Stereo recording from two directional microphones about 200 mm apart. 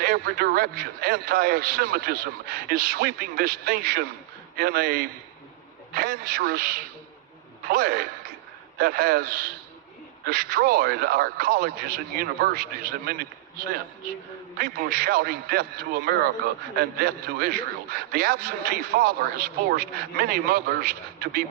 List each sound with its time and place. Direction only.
0.0 s a man's voice: 50° right (ahead or behind)
14.6 s a man's voice: 50° right (ahead or behind)